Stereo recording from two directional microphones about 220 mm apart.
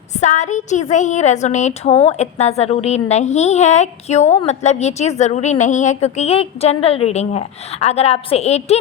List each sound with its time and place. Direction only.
0.1 s a woman's voice: 35° left (ahead or behind)